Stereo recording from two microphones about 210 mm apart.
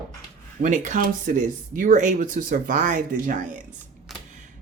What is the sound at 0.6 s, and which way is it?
Speech, 35° right (ahead or behind).